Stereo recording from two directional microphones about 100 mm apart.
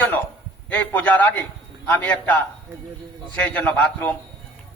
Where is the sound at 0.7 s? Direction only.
15° left (ahead or behind).